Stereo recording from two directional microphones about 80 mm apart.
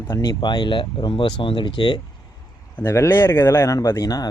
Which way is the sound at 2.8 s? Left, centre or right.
Left.